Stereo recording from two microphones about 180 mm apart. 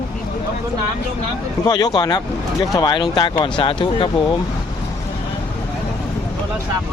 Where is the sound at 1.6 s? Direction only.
20° left (ahead or behind).